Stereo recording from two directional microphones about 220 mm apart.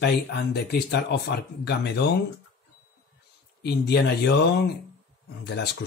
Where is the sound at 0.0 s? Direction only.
50° left (ahead or behind).